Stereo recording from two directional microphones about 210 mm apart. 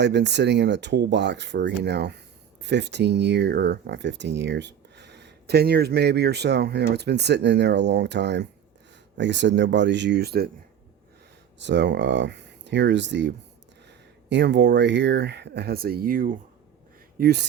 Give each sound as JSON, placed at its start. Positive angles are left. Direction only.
{"t": 0.0, "sound": "speech", "side_deg": -55}
{"t": 11.6, "sound": "speech", "side_deg": -55}